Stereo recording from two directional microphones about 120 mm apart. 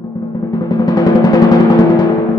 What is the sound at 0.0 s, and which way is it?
Timpani, 30° left (ahead or behind).